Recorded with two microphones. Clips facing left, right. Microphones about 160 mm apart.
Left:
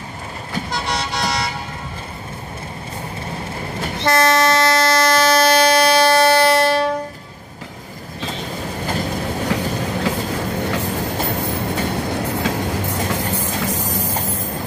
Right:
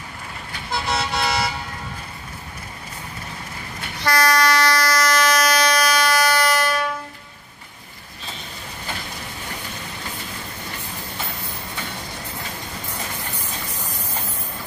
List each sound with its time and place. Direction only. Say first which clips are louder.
0.7 s vehicle: right 2 dB; centre (ahead or behind)
4.0 s train: left 3 dB; 25° left (ahead or behind)
8.8 s vehicle: left 11 dB; 50° left (ahead or behind)
9.5 s train: left 14 dB; 70° left (ahead or behind)
13.6 s train: left 11 dB; 90° left